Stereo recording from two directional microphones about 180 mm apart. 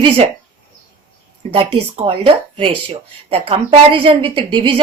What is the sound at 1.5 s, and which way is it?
Speech, 30° right (ahead or behind).